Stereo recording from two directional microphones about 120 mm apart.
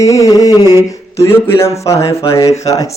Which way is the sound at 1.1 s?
25° left (ahead or behind).